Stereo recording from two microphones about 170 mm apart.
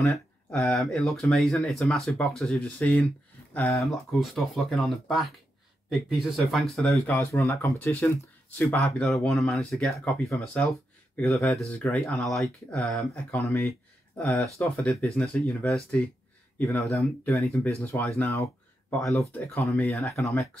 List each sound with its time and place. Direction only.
0.5 s speech: centre (ahead or behind)
3.8 s speech: centre (ahead or behind)
7.2 s speech: 15° left (ahead or behind)
19.0 s speech: centre (ahead or behind)